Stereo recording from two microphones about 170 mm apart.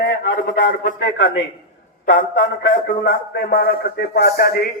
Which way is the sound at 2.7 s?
55° left (ahead or behind).